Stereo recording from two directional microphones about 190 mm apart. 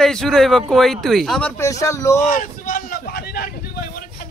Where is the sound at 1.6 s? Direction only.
15° left (ahead or behind).